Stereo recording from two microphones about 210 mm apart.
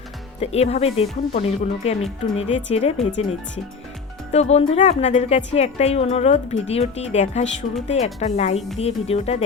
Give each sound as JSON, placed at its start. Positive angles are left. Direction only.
{"t": 0.3, "sound": "speech", "side_deg": 30}
{"t": 4.3, "sound": "speech", "side_deg": 30}